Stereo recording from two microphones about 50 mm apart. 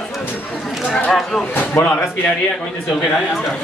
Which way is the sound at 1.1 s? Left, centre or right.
Centre.